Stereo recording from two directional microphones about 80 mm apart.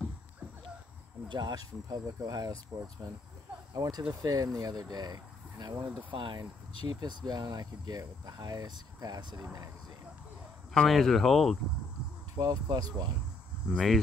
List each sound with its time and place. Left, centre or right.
1.3 s speech: right
2.7 s speech: centre
3.7 s speech: right
6.0 s speech: right
6.9 s speech: right
10.7 s speech: centre
12.4 s speech: right
13.7 s speech: centre